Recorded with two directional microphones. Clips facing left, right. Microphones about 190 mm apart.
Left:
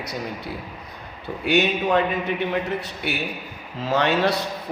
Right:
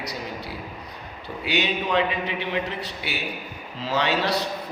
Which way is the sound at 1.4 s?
50° left (ahead or behind).